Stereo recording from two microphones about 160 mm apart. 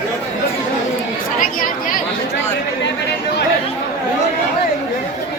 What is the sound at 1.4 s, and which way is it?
Chatter, 60° left (ahead or behind).